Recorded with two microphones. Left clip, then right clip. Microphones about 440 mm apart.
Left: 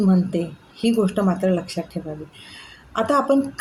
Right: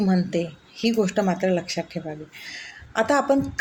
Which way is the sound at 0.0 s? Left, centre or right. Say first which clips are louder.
Left 2 dB; left.